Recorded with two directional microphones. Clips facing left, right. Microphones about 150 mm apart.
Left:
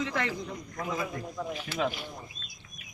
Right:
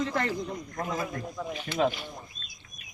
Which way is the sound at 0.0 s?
40° right (ahead or behind).